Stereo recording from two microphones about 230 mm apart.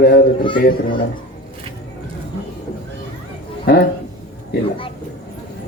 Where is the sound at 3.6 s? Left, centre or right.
Left.